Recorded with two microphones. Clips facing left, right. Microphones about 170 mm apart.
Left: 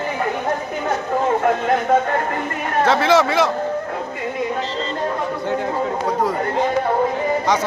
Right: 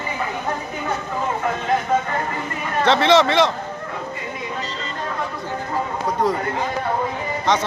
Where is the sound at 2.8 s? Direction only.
5° left (ahead or behind).